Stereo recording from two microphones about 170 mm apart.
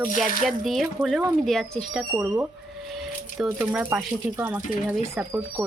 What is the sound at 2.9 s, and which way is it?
Speech, centre (ahead or behind).